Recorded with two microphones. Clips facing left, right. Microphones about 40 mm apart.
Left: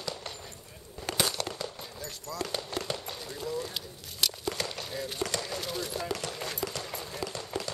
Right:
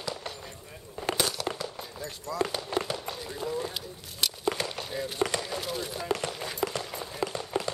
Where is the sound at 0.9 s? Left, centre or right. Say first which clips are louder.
Right 5 dB; right.